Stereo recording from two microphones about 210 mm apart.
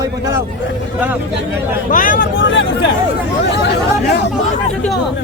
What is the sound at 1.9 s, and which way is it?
Speech, 40° left (ahead or behind).